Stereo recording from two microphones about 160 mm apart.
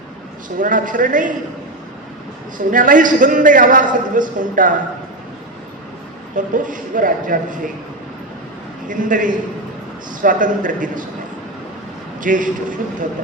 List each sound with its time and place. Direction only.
0.6 s a man's voice: 55° right (ahead or behind)
2.6 s a man's voice: 55° right (ahead or behind)
6.3 s a man's voice: 55° right (ahead or behind)
8.9 s a man's voice: 55° right (ahead or behind)
12.2 s a man's voice: 55° right (ahead or behind)